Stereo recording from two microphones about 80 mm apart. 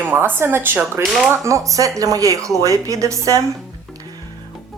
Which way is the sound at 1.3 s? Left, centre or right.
Right.